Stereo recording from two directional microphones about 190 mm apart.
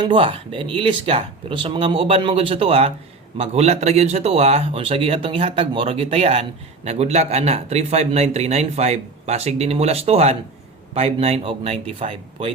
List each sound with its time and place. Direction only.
0.0 s speech: 25° right (ahead or behind)